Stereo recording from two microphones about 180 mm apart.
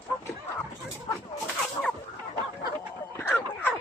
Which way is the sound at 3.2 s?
10° left (ahead or behind).